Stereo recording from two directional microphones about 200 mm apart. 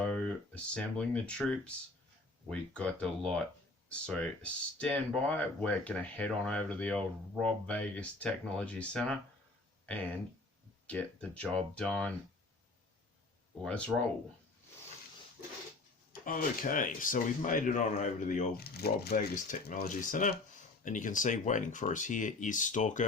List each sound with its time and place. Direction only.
0.0 s speech: 5° left (ahead or behind)
10.8 s speech: 5° left (ahead or behind)
13.7 s speech: 5° left (ahead or behind)
16.2 s speech: 45° left (ahead or behind)